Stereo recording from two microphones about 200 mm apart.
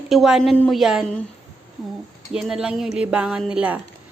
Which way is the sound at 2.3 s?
5° right (ahead or behind).